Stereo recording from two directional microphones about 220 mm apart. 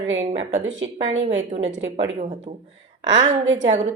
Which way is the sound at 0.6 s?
60° right (ahead or behind).